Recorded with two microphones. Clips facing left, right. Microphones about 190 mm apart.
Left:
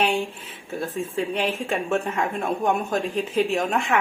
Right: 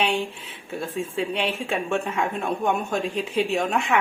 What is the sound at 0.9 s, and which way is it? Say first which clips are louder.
Speech: even; centre (ahead or behind).